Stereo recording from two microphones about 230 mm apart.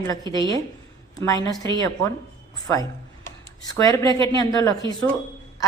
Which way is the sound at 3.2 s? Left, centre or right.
Centre.